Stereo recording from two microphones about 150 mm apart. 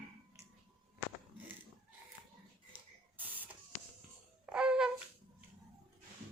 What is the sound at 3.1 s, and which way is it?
Printer, 10° right (ahead or behind).